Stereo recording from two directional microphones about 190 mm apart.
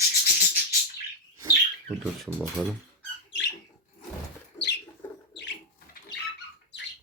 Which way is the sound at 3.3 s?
70° left (ahead or behind).